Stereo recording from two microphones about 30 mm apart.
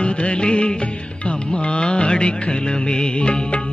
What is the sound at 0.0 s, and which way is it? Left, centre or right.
Music, left.